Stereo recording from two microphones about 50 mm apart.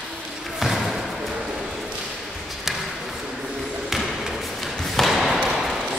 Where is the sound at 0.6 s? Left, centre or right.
Centre.